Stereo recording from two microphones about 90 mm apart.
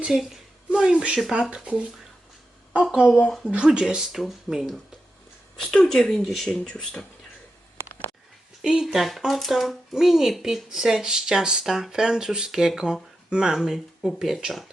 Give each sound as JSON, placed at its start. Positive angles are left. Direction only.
{"t": 0.0, "sound": "speech", "side_deg": -5}
{"t": 2.8, "sound": "speech", "side_deg": -10}
{"t": 7.8, "sound": "a sound", "side_deg": -30}
{"t": 8.6, "sound": "speech", "side_deg": -5}